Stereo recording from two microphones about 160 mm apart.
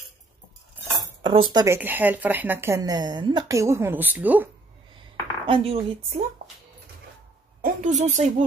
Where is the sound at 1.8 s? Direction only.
10° right (ahead or behind).